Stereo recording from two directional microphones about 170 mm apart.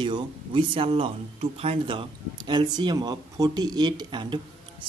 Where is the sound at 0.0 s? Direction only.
25° right (ahead or behind).